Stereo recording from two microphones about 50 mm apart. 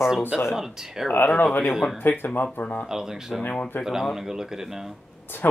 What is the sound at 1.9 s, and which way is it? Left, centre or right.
Speech, left.